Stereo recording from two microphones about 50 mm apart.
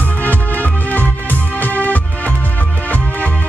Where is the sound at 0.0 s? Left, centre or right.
Left.